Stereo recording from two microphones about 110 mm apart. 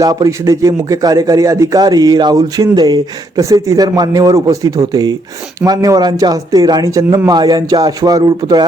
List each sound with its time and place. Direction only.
0.0 s a man's voice: 35° right (ahead or behind)